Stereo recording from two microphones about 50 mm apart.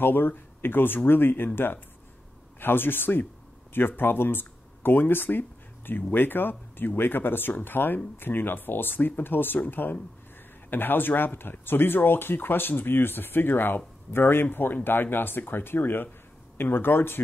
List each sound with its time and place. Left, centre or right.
0.0 s speech: left